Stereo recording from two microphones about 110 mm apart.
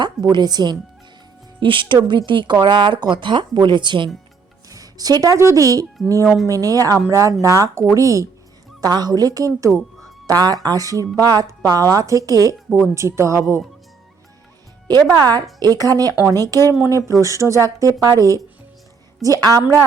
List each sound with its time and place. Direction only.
0.0 s speech: 40° right (ahead or behind)
1.5 s a woman's voice: 50° right (ahead or behind)
4.7 s a woman's voice: 35° right (ahead or behind)
6.2 s speech: centre (ahead or behind)
6.5 s a woman's voice: 30° right (ahead or behind)
15.2 s a woman's voice: 35° right (ahead or behind)